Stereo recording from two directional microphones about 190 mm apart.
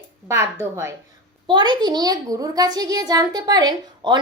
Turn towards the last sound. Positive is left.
turn(degrees=-20)  # may be behind; listen again after turning